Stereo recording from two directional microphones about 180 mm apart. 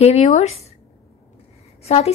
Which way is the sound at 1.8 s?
35° left (ahead or behind).